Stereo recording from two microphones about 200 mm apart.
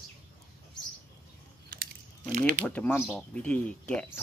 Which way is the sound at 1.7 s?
45° right (ahead or behind).